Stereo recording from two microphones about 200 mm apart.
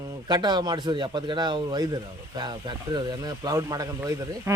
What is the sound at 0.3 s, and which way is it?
Speech, 20° right (ahead or behind).